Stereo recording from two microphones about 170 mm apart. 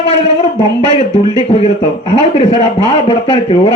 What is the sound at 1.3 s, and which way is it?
A man's voice, 35° left (ahead or behind).